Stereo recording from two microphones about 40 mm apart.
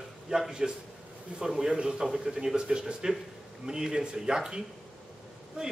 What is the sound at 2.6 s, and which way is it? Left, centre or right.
A man's voice, right.